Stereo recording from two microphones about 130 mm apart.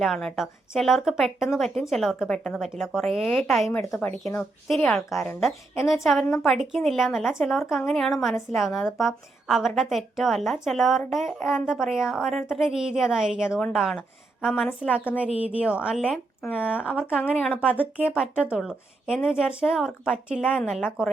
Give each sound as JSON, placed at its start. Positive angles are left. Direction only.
{"t": 0.0, "sound": "a woman's voice", "side_deg": 5}
{"t": 3.9, "sound": "speech", "side_deg": 20}
{"t": 4.7, "sound": "a woman's voice", "side_deg": 0}
{"t": 16.6, "sound": "a woman's voice", "side_deg": -10}